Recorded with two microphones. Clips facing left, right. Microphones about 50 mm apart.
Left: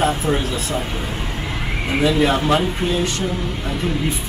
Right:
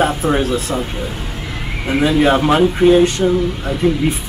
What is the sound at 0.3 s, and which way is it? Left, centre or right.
Speech, centre.